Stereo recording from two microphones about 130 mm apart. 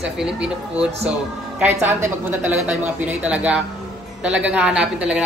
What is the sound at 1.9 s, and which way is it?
A man's voice, 15° right (ahead or behind).